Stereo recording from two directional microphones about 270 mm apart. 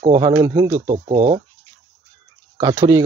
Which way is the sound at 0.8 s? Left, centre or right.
Right.